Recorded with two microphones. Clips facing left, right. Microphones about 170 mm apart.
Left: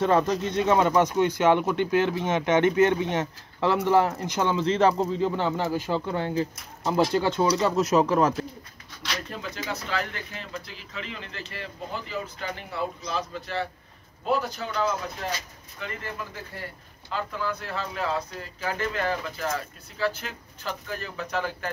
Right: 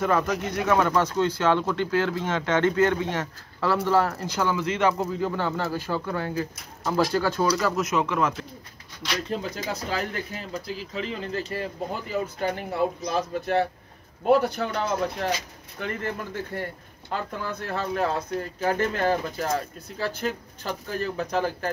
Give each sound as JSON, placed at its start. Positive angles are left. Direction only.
{"t": 0.0, "sound": "speech", "side_deg": 30}
{"t": 5.1, "sound": "speech", "side_deg": 20}
{"t": 9.3, "sound": "speech", "side_deg": -35}